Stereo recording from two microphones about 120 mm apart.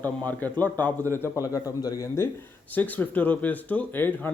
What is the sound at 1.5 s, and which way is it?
Speech, 30° left (ahead or behind).